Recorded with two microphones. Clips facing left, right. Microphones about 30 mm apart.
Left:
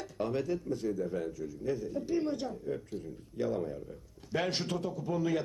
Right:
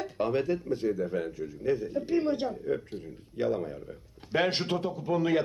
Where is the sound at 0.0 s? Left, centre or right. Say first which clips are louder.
Right 5 dB; right.